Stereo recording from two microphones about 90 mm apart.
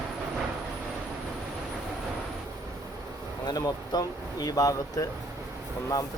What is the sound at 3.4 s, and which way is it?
Speech, 45° left (ahead or behind).